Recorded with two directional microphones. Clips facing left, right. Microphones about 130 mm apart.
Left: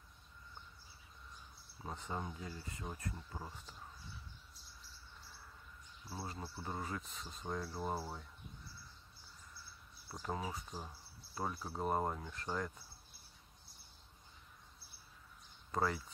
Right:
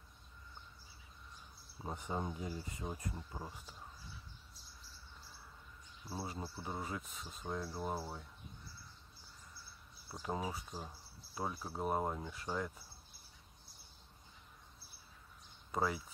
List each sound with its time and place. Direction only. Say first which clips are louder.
1.8 s speech: right 3 dB; 15° right (ahead or behind)
6.2 s speech: left 1 dB; 5° right (ahead or behind)
10.0 s speech: right 2 dB; 5° right (ahead or behind)
15.7 s speech: even; 5° right (ahead or behind)